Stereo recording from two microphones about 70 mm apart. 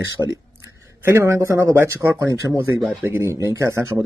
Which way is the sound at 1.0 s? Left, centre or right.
Right.